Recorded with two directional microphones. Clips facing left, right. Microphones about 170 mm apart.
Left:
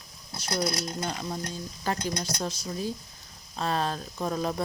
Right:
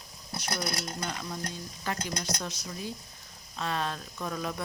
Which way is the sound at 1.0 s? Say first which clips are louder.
Left 3 dB; 35° left (ahead or behind).